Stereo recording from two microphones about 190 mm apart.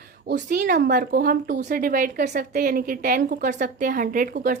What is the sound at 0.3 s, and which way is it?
A woman's voice, 45° right (ahead or behind).